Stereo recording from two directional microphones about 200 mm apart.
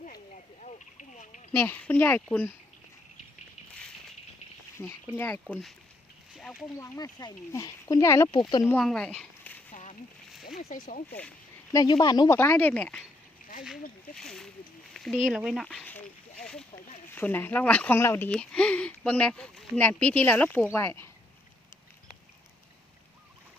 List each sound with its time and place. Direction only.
0.0 s a sound: 40° left (ahead or behind)
1.5 s speech: 10° left (ahead or behind)
4.8 s speech: 10° left (ahead or behind)
6.3 s a sound: centre (ahead or behind)
6.7 s speech: 15° left (ahead or behind)
8.7 s speech: 5° left (ahead or behind)
10.6 s speech: 35° left (ahead or behind)
11.7 s speech: 20° left (ahead or behind)
14.2 s speech: centre (ahead or behind)